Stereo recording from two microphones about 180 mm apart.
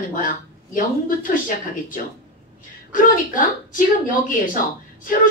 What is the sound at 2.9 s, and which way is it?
Speech, 50° left (ahead or behind).